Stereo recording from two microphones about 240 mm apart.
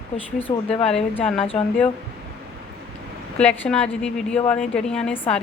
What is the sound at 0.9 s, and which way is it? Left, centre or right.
Speech, centre.